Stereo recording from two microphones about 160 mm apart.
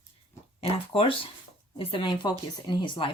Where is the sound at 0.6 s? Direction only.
35° left (ahead or behind).